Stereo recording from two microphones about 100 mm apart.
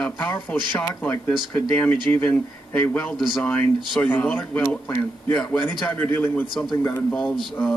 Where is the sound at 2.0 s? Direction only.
15° left (ahead or behind).